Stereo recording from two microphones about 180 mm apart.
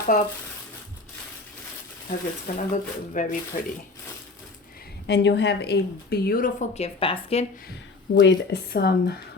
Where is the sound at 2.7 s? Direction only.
45° left (ahead or behind).